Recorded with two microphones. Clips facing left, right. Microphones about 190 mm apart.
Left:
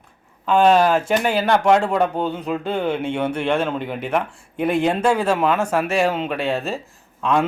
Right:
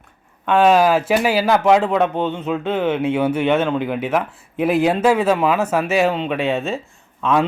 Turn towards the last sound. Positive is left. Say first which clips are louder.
# right 2 dB
turn(degrees=0)  # may be behind; listen again after turning